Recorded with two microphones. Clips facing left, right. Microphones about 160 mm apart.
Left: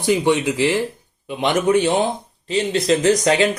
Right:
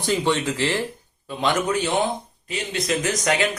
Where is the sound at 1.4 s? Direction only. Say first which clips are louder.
Left 5 dB; 25° left (ahead or behind).